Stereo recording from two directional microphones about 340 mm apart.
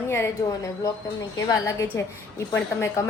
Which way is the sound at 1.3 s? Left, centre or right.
Centre.